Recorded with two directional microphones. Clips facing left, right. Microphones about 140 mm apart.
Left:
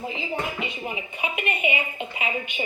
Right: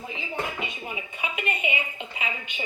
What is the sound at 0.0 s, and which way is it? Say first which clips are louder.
A woman's voice: left 3 dB; 20° left (ahead or behind).